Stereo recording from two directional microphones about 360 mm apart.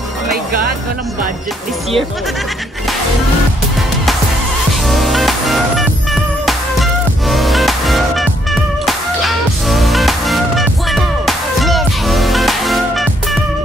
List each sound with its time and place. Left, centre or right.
4.8 s music: centre